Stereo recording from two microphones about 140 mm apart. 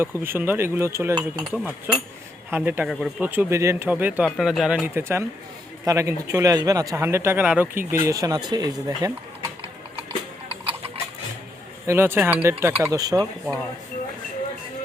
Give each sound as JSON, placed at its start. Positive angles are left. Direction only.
{"t": 0.0, "sound": "speech", "side_deg": -15}
{"t": 1.5, "sound": "speech", "side_deg": -5}
{"t": 3.2, "sound": "speech", "side_deg": -15}
{"t": 10.7, "sound": "a sound", "side_deg": -45}
{"t": 11.9, "sound": "speech", "side_deg": -15}